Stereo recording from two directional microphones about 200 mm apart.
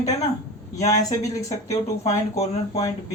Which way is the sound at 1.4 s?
35° left (ahead or behind).